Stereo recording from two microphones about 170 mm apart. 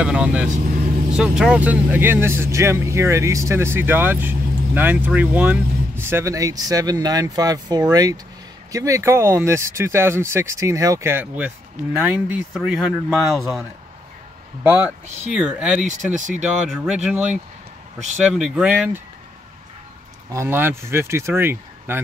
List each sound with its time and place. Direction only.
0.0 s speech: 5° right (ahead or behind)
15.3 s speech: 5° right (ahead or behind)
15.8 s speech: 45° right (ahead or behind)
16.7 s speech: 5° right (ahead or behind)
18.3 s speech: 5° right (ahead or behind)
20.3 s speech: 10° right (ahead or behind)